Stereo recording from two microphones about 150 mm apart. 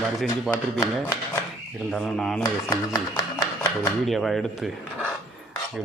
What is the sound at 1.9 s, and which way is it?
Speech, centre (ahead or behind).